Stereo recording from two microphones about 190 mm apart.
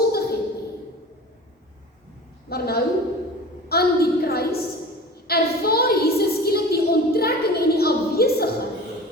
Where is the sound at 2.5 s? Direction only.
55° left (ahead or behind).